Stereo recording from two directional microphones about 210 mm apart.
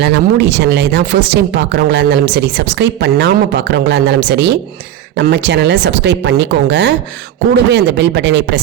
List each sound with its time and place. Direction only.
0.0 s speech: 55° right (ahead or behind)